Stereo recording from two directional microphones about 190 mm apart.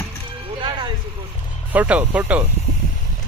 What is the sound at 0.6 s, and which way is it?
Vehicle, 25° right (ahead or behind).